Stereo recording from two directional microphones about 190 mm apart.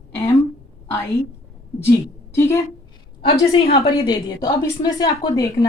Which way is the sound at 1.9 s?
15° left (ahead or behind).